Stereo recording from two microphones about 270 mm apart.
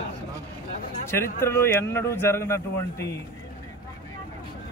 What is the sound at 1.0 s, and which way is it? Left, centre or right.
A man's voice, centre.